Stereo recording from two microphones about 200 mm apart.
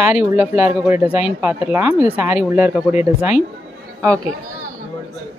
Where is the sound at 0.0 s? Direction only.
10° right (ahead or behind).